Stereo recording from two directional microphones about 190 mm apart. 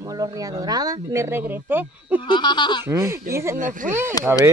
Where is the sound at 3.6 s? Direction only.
45° right (ahead or behind).